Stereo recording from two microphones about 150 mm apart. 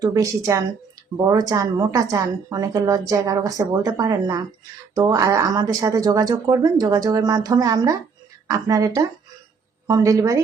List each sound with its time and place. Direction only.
0.0 s speech: 20° right (ahead or behind)